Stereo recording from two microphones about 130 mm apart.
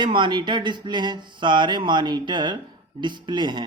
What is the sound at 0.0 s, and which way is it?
Speech, 40° right (ahead or behind).